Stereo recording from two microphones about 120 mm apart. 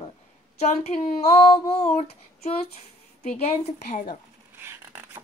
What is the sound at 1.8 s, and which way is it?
Speech, 55° left (ahead or behind).